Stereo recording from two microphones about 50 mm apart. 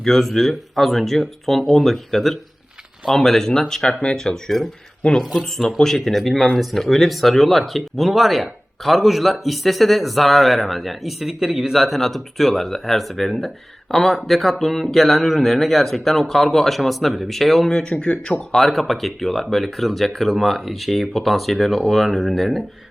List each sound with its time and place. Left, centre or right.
0.0 s speech: centre
5.0 s speech: left
5.4 s speech: centre
18.5 s speech: centre